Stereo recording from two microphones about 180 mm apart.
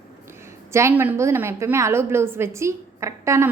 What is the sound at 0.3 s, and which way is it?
A woman's voice, 15° right (ahead or behind).